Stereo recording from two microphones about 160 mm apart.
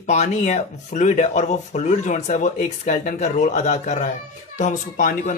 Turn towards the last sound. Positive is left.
turn(degrees=55)  # may be behind; listen again after turning